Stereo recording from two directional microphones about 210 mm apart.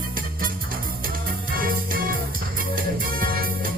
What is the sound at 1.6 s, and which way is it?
Music, 45° right (ahead or behind).